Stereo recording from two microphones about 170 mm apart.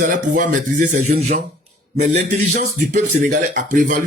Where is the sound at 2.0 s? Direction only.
45° right (ahead or behind).